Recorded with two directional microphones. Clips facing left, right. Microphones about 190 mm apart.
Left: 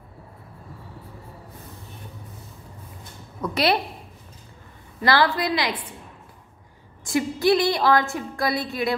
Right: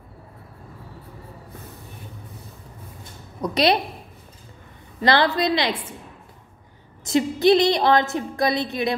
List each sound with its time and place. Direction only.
3.3 s a woman's voice: 20° right (ahead or behind)
5.0 s a woman's voice: 20° right (ahead or behind)
7.1 s a woman's voice: 20° right (ahead or behind)